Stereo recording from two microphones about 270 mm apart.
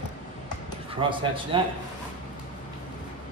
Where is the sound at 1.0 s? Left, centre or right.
Centre.